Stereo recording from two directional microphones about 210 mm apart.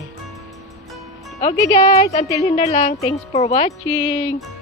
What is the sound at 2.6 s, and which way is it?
Speech, 30° left (ahead or behind).